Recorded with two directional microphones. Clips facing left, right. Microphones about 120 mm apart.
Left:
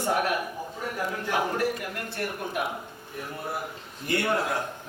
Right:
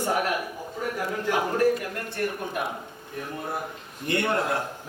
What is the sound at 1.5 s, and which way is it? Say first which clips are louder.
A man's voice: right 5 dB; 15° left (ahead or behind).